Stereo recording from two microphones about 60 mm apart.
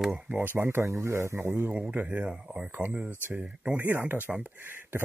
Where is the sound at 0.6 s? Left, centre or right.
Right.